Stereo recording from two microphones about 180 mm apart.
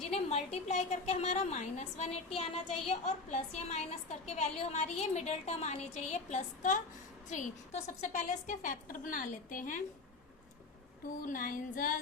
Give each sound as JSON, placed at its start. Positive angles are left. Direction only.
{"t": 0.1, "sound": "a woman's voice", "side_deg": 35}
{"t": 11.2, "sound": "a woman's voice", "side_deg": 50}